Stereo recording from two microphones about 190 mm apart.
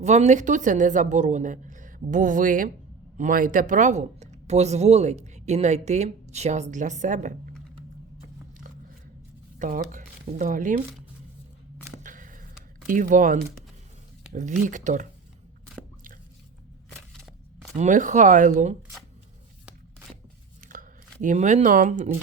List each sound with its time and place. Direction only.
0.0 s speech: 35° right (ahead or behind)
9.6 s speech: 45° right (ahead or behind)
12.0 s a sound: 45° right (ahead or behind)
12.9 s speech: 45° right (ahead or behind)
17.7 s speech: 40° right (ahead or behind)
20.7 s speech: 45° right (ahead or behind)